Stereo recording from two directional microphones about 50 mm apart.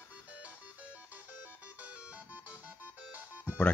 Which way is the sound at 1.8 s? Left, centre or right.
Right.